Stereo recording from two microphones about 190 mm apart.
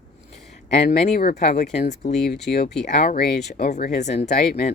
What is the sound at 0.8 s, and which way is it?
Speech, 55° left (ahead or behind).